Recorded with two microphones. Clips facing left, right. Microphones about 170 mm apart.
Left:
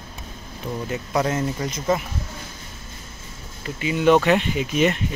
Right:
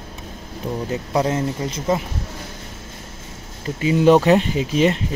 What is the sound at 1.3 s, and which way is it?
Speech, 30° right (ahead or behind).